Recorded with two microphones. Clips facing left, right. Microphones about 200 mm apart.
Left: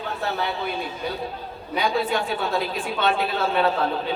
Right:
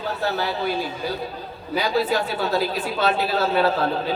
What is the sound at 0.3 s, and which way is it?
A man's voice, centre (ahead or behind).